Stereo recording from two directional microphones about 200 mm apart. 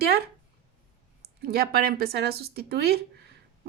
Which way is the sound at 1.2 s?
50° right (ahead or behind).